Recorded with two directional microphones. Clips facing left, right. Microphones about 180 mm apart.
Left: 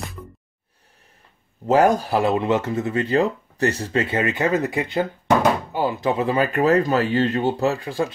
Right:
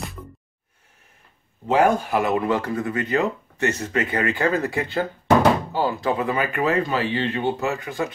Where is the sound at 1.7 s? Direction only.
40° left (ahead or behind).